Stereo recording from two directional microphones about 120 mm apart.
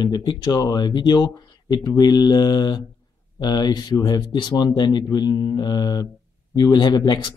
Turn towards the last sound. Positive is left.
turn(degrees=35)  # may be behind; listen again after turning